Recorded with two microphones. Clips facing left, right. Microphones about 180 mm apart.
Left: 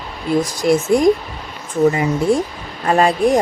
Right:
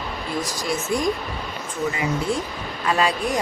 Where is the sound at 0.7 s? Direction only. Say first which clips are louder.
Left 10 dB; 55° left (ahead or behind).